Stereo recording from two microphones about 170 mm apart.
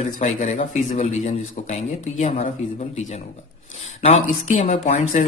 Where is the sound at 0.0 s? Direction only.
40° left (ahead or behind).